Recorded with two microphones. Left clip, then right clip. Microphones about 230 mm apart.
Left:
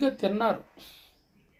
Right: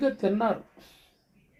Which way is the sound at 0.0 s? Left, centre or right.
Left.